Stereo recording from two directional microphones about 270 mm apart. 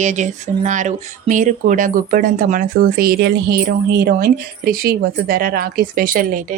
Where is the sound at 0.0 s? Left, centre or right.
Right.